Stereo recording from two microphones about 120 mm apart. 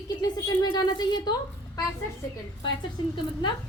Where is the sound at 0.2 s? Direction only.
35° left (ahead or behind).